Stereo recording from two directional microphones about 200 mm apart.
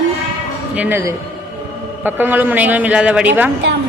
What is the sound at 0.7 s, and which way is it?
A man's voice, 10° right (ahead or behind).